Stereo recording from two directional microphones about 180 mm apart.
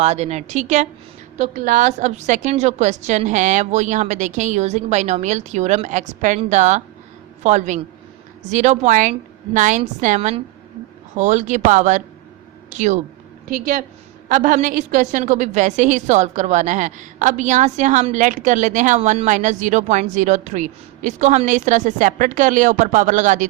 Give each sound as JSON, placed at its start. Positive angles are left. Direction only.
{"t": 0.0, "sound": "a woman's voice", "side_deg": -40}